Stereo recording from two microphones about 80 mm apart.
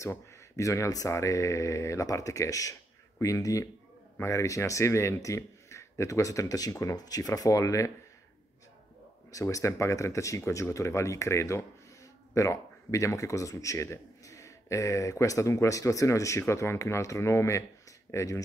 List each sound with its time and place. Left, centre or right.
0.0 s speech: left
7.0 s speech: left
9.3 s speech: left